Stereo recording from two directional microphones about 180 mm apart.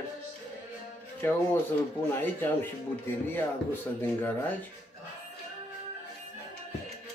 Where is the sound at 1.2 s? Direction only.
10° left (ahead or behind).